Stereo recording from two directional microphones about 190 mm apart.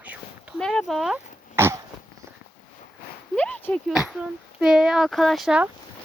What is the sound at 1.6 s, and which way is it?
Dog, 15° right (ahead or behind).